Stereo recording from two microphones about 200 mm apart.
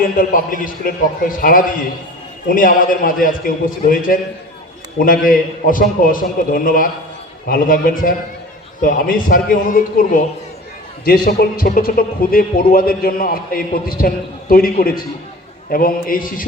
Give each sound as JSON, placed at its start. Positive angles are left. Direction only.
{"t": 0.2, "sound": "a man's voice", "side_deg": 45}